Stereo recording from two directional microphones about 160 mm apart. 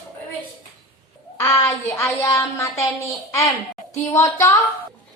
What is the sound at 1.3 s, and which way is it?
A child's voice, 15° left (ahead or behind).